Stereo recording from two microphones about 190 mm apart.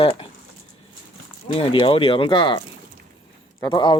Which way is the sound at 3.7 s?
25° left (ahead or behind).